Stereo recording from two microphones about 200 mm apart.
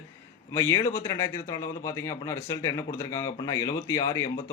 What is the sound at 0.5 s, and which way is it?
Speech, 15° left (ahead or behind).